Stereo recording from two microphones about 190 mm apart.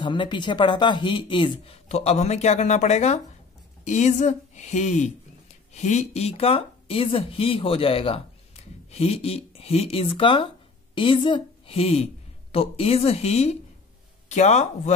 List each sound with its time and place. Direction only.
0.0 s speech: 25° left (ahead or behind)